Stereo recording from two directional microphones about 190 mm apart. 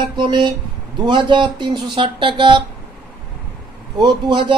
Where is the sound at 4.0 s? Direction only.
25° right (ahead or behind).